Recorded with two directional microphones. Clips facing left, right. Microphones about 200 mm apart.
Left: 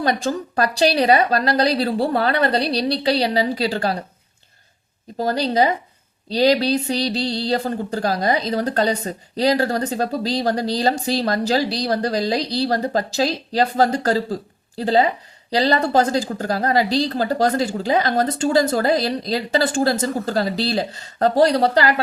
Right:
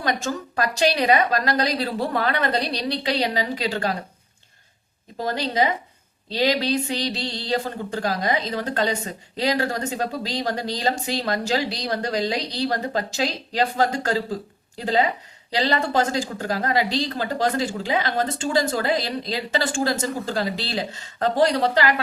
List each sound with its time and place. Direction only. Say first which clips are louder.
0.0 s speech: left 4 dB; 35° left (ahead or behind)
5.1 s speech: left 4 dB; 35° left (ahead or behind)